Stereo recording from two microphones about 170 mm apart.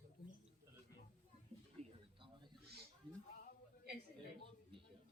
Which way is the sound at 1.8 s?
40° right (ahead or behind).